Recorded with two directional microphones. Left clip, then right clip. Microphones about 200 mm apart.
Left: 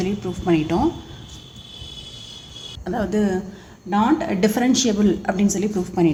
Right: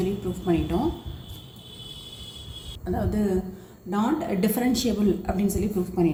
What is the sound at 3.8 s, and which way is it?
A woman's voice, 50° left (ahead or behind).